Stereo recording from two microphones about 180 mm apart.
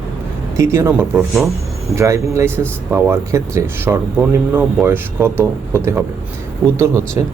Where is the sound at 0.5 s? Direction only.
15° right (ahead or behind).